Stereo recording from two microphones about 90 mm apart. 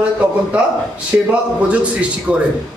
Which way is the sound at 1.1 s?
15° right (ahead or behind).